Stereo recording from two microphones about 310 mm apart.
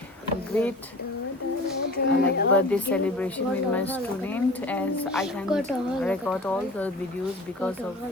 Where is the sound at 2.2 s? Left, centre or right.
Left.